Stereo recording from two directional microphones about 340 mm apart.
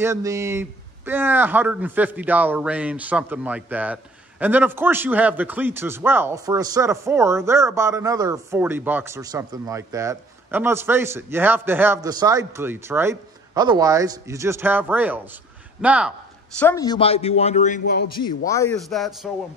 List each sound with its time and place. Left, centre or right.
0.0 s a man's voice: centre
16.5 s a man's voice: centre